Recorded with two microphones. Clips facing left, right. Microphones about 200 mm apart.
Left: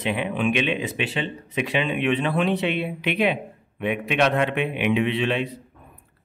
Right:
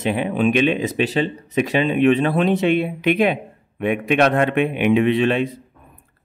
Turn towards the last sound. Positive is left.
turn(degrees=-45)  # may be behind; listen again after turning